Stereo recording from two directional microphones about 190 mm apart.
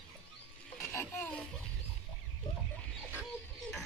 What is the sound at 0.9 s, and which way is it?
Speech, 10° left (ahead or behind).